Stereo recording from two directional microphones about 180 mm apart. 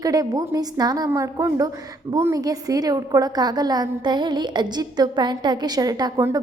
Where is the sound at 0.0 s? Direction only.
20° right (ahead or behind).